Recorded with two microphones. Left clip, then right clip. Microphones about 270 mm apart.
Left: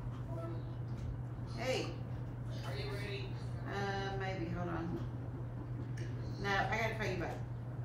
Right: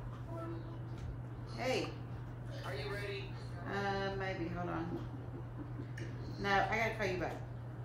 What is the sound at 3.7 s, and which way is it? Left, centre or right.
Mantra, right.